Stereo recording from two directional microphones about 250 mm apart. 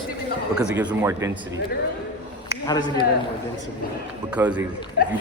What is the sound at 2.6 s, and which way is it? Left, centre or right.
Speech, centre.